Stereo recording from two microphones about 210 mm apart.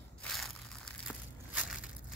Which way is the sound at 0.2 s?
Centre (ahead or behind).